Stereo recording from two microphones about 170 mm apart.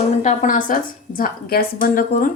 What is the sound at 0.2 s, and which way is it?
A woman's voice, 50° left (ahead or behind).